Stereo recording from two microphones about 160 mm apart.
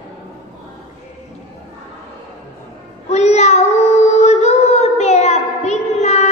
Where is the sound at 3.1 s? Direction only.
45° left (ahead or behind).